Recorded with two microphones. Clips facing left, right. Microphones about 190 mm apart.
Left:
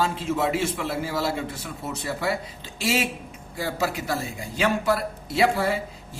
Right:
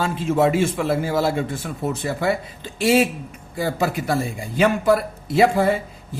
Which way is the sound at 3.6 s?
50° right (ahead or behind).